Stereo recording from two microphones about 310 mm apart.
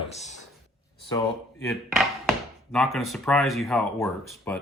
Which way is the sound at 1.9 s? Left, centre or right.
Centre.